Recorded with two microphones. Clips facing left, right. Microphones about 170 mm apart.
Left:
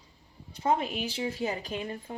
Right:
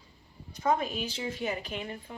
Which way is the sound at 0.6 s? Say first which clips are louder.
Left 1 dB; 30° left (ahead or behind).